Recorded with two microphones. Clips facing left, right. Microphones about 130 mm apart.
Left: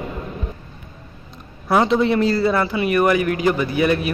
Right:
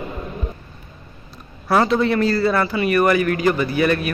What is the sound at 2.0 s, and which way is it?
A man's voice, 20° left (ahead or behind).